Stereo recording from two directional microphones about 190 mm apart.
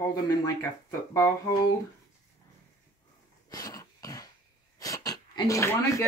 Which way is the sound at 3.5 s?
20° left (ahead or behind).